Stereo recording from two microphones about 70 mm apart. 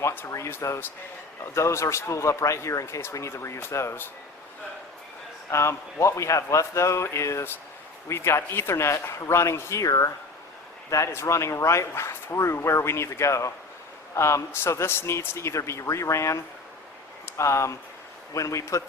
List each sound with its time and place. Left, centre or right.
0.0 s a sound: left
0.3 s speech: left
1.5 s speech: left
5.5 s speech: left